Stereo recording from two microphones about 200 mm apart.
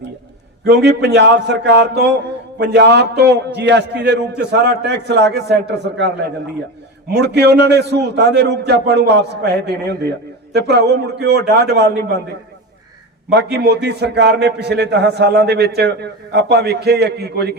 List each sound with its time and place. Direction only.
0.6 s a man's voice: 55° right (ahead or behind)
7.1 s a man's voice: 55° right (ahead or behind)
13.3 s a man's voice: 55° right (ahead or behind)